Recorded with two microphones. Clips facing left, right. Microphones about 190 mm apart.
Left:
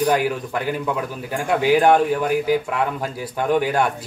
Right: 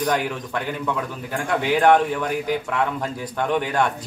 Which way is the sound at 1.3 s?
10° left (ahead or behind).